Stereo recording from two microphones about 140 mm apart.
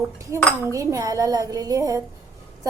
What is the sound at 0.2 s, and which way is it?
A woman's voice, 20° right (ahead or behind).